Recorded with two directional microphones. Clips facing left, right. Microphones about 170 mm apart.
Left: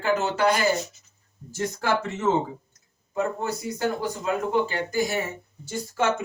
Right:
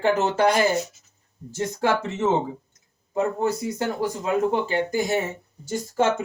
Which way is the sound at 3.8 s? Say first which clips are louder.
Right 1 dB; 25° right (ahead or behind).